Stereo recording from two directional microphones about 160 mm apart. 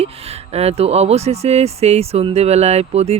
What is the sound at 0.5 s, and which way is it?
Speech, 40° right (ahead or behind).